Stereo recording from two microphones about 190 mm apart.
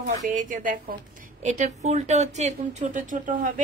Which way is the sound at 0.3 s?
45° right (ahead or behind).